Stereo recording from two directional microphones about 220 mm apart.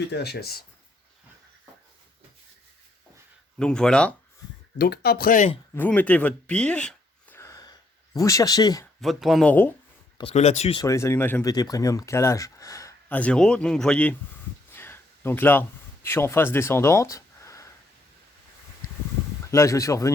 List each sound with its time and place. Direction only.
0.1 s speech: 50° left (ahead or behind)
3.6 s speech: 5° left (ahead or behind)
4.8 s speech: 45° left (ahead or behind)
5.7 s a sound: 10° left (ahead or behind)
9.0 s speech: centre (ahead or behind)
10.2 s speech: 30° left (ahead or behind)
10.8 s speech: 15° left (ahead or behind)
14.7 s a sound: 10° left (ahead or behind)
16.0 s speech: 10° left (ahead or behind)
19.5 s speech: 15° left (ahead or behind)